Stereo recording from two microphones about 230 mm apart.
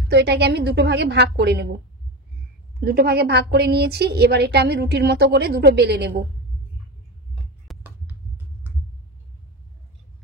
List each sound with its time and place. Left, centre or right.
0.1 s a woman's voice: right
2.8 s a woman's voice: right
7.7 s a sound: centre